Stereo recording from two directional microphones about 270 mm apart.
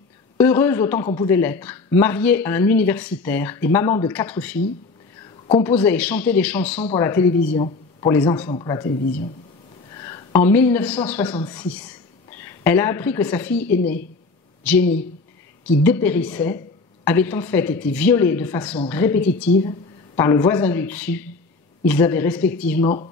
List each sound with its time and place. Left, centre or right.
0.4 s a man's voice: centre
5.6 s a man's voice: centre
7.5 s a man's voice: centre
9.0 s speech: left
9.8 s a woman's voice: centre